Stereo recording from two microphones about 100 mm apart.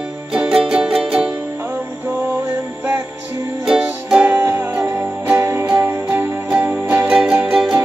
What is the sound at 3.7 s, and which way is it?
Music, 10° right (ahead or behind).